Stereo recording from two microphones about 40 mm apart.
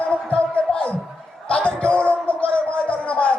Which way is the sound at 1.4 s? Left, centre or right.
Left.